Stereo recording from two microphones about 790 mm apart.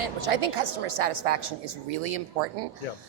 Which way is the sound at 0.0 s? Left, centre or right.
Right.